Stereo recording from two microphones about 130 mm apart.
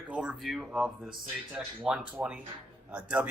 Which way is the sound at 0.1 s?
10° right (ahead or behind).